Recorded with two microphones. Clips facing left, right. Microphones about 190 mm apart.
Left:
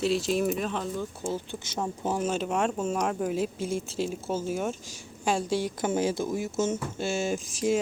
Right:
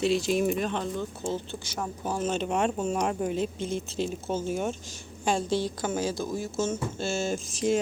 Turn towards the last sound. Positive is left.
turn(degrees=10)  # may be behind; listen again after turning